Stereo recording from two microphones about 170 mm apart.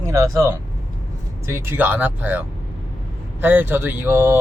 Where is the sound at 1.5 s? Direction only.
15° right (ahead or behind).